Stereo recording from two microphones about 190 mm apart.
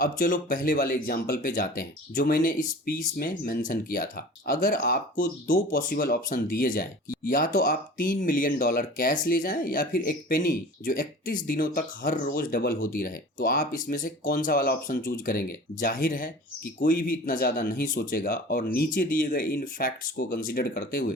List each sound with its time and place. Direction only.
0.0 s speech: 50° left (ahead or behind)